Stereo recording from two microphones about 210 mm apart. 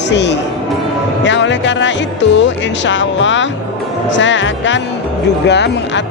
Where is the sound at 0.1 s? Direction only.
55° left (ahead or behind).